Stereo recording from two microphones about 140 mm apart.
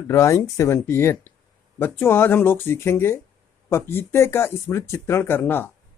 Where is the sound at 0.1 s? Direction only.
20° left (ahead or behind).